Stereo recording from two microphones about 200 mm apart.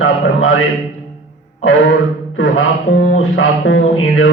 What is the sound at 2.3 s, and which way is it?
Music, 75° left (ahead or behind).